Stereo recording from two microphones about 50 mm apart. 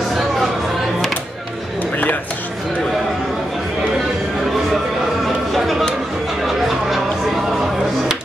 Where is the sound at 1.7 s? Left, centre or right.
Left.